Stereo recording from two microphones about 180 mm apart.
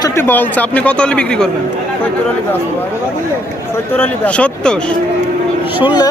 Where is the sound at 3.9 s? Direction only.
10° left (ahead or behind).